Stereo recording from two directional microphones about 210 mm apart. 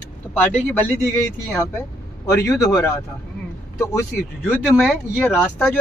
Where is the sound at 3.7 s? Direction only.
15° left (ahead or behind).